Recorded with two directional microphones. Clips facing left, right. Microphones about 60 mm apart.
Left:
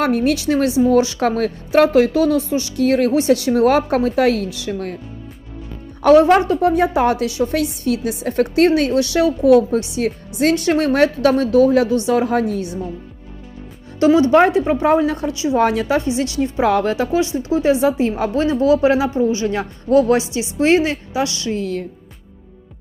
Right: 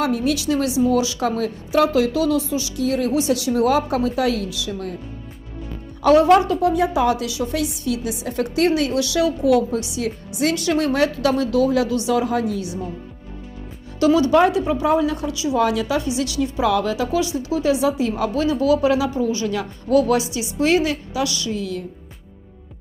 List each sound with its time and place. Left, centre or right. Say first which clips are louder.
0.0 s a woman's voice: left 4 dB; left
6.0 s a woman's voice: left 2 dB; left
14.0 s speech: left 3 dB; left